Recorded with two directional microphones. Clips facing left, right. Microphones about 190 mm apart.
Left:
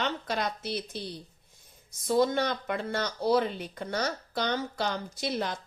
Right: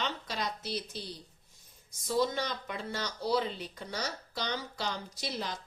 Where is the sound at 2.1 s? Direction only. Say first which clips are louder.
Left 5 dB; 55° left (ahead or behind).